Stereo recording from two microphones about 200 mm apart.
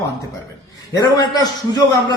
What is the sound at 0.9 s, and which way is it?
A man's voice, 20° left (ahead or behind).